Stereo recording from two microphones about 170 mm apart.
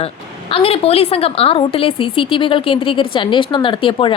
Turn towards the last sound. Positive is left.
turn(degrees=30)  # may be behind; listen again after turning